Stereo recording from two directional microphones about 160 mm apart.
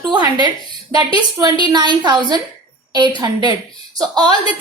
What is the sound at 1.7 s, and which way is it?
Speech, 30° right (ahead or behind).